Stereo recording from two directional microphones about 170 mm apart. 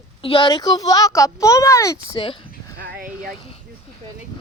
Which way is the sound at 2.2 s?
30° left (ahead or behind).